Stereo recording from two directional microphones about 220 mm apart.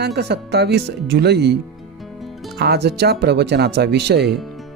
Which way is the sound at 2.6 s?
50° right (ahead or behind).